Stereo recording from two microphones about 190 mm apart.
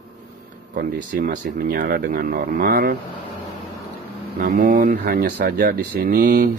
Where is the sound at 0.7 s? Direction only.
45° right (ahead or behind).